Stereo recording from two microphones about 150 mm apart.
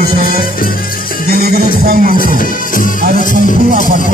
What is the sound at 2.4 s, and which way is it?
Music, 65° left (ahead or behind).